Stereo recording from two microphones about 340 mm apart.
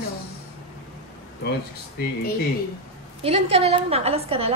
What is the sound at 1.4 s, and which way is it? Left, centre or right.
Speech, left.